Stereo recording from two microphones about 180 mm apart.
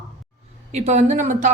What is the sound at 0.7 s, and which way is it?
Speech, 40° right (ahead or behind).